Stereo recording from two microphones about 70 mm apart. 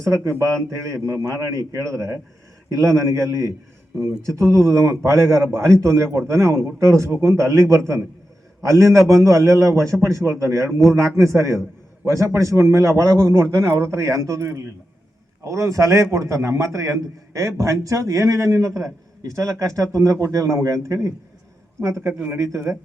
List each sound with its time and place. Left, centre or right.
0.0 s a man's voice: right
4.5 s a man's voice: right